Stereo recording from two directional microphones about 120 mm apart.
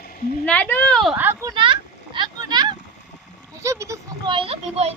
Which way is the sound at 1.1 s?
15° right (ahead or behind).